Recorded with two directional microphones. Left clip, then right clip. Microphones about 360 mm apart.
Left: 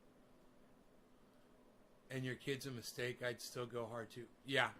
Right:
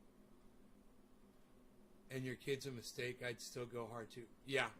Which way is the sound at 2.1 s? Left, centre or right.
Left.